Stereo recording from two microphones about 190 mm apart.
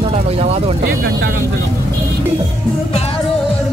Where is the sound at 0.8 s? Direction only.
60° right (ahead or behind).